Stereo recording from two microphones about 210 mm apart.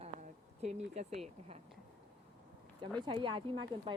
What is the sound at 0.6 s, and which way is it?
Speech, 30° right (ahead or behind).